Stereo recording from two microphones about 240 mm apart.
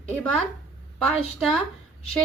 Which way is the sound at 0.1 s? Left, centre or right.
Centre.